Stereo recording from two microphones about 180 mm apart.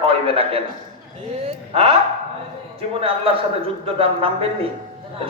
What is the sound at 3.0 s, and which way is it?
A man's voice, 30° right (ahead or behind).